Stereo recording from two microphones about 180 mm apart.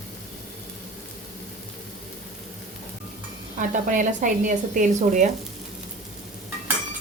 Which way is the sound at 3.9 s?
45° right (ahead or behind).